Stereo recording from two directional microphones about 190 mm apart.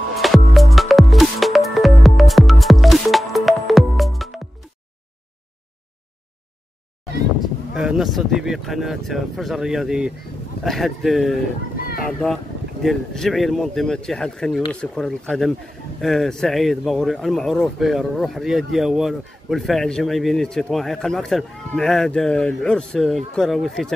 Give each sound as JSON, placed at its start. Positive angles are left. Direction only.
{"t": 0.1, "sound": "music", "side_deg": 0}
{"t": 7.7, "sound": "speech", "side_deg": -5}